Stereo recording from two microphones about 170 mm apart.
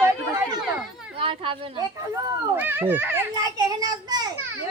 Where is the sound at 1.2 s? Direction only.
35° right (ahead or behind).